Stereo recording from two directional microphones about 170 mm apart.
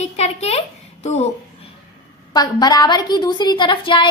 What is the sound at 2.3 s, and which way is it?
A woman's voice, 25° left (ahead or behind).